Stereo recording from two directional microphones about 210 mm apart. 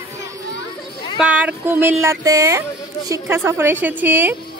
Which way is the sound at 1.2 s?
5° right (ahead or behind).